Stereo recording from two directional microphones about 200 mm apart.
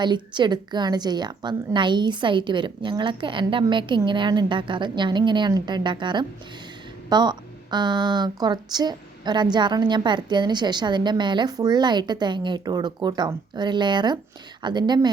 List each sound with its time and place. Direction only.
0.0 s speech: 20° right (ahead or behind)